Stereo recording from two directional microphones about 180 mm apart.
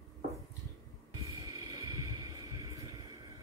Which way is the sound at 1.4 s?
20° right (ahead or behind).